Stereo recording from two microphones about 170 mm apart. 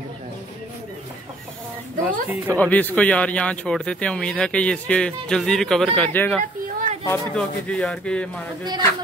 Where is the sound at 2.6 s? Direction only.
10° left (ahead or behind).